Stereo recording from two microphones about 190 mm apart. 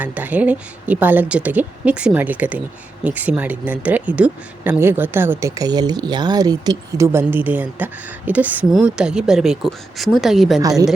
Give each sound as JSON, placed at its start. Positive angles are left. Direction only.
{"t": 0.0, "sound": "speech", "side_deg": -10}
{"t": 10.6, "sound": "speech", "side_deg": -20}